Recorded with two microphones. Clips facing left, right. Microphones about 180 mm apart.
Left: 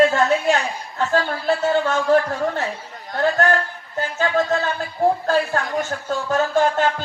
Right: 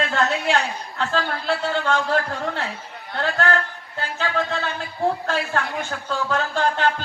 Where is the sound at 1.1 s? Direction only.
45° left (ahead or behind).